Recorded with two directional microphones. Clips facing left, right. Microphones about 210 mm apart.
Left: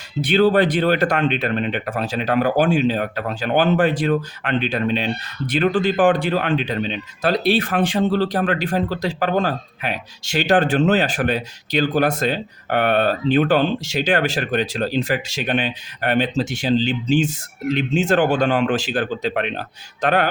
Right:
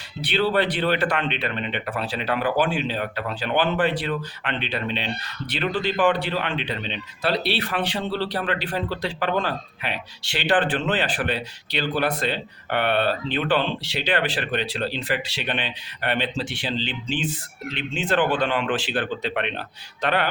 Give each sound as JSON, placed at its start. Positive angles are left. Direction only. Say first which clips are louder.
{"t": 0.2, "sound": "speech", "louder": "left 7 dB", "side_deg": 45}